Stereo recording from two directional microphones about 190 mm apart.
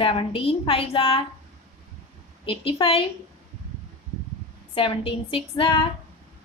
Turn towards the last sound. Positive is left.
turn(degrees=30)  # may be behind; listen again after turning